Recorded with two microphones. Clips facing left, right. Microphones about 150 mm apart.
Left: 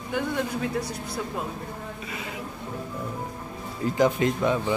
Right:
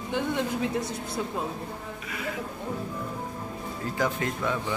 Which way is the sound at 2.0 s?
25° left (ahead or behind).